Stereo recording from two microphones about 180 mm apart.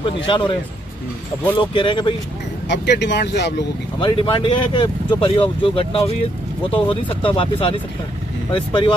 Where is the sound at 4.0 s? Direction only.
30° left (ahead or behind).